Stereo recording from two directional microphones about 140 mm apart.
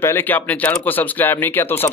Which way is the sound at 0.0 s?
15° left (ahead or behind).